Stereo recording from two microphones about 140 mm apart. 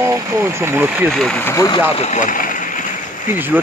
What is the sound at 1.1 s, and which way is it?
Speech, 5° left (ahead or behind).